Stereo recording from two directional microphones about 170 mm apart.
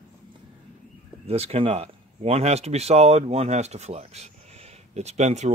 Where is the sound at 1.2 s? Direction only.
35° right (ahead or behind).